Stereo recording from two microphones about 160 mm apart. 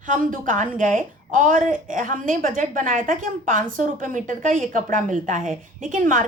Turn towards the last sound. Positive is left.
turn(degrees=-55)  # may be behind; listen again after turning